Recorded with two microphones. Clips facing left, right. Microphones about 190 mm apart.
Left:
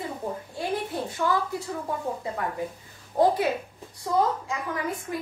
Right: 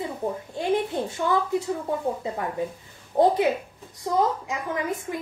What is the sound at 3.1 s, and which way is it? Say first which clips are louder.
A woman's voice: right 2 dB; 25° right (ahead or behind).